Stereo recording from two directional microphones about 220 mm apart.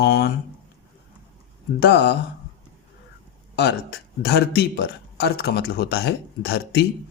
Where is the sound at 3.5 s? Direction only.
50° left (ahead or behind).